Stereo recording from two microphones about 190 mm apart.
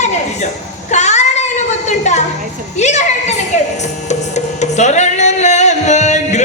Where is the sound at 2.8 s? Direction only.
35° left (ahead or behind).